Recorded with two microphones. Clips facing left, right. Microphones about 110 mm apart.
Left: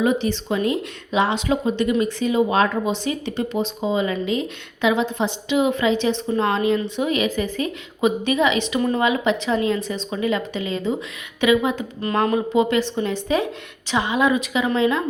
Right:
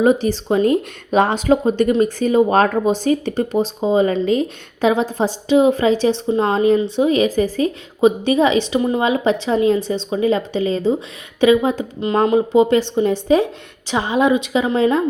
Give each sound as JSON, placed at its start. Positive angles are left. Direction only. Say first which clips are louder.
{"t": 0.0, "sound": "a woman's voice", "louder": "right 5 dB", "side_deg": -40}
{"t": 6.2, "sound": "a woman's voice", "louder": "right 5 dB", "side_deg": -25}
{"t": 8.8, "sound": "a woman's voice", "louder": "right 2 dB", "side_deg": -20}
{"t": 9.0, "sound": "a woman's voice", "louder": "right 3 dB", "side_deg": -30}